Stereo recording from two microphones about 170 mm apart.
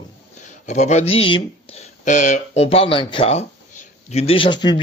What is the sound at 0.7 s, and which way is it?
Speech, 45° left (ahead or behind).